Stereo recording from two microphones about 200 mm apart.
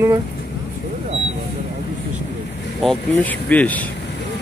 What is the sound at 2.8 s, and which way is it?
Speech, centre (ahead or behind).